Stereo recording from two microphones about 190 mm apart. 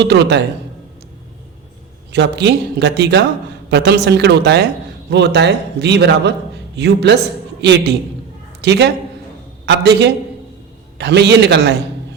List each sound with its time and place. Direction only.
0.0 s a man's voice: 65° right (ahead or behind)
2.1 s a man's voice: 65° right (ahead or behind)